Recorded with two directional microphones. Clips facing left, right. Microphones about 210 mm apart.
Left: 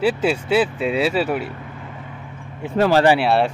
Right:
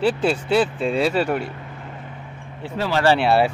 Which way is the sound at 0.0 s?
5° left (ahead or behind).